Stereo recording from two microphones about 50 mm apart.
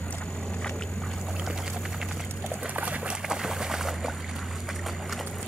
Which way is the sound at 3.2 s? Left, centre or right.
Centre.